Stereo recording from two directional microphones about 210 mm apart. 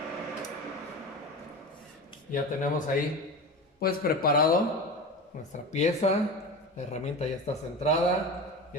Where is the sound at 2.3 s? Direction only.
40° left (ahead or behind).